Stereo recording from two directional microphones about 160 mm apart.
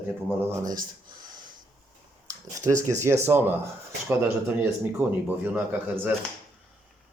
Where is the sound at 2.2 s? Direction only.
20° right (ahead or behind).